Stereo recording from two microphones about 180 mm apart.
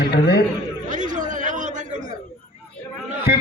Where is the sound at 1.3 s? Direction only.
45° right (ahead or behind).